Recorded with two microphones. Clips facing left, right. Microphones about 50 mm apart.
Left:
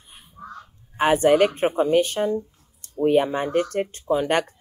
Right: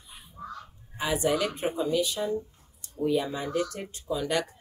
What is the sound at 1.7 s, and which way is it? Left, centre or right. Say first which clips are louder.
Speech: left 8 dB; left.